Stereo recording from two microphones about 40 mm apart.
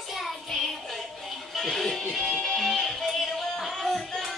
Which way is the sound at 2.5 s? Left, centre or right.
Centre.